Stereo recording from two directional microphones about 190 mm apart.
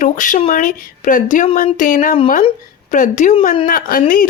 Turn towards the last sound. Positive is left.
turn(degrees=50)  # may be behind; listen again after turning